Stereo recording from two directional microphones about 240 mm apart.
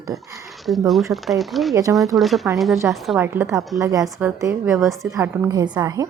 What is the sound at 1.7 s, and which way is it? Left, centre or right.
Speech, centre.